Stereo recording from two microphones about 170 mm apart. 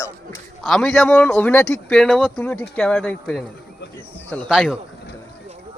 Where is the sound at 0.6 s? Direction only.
5° left (ahead or behind).